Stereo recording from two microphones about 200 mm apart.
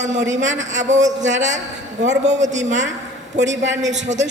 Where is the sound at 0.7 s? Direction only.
35° right (ahead or behind).